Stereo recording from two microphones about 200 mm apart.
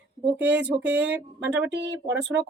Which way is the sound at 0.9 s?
60° right (ahead or behind).